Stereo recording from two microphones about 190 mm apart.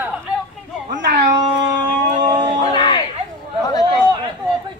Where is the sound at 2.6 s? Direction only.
25° left (ahead or behind).